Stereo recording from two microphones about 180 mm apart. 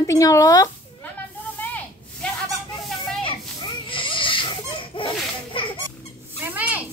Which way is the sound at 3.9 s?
30° left (ahead or behind).